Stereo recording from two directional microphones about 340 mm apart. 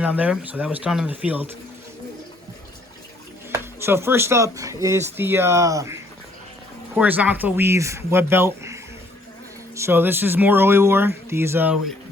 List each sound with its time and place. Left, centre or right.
0.0 s speech: centre
3.5 s speech: centre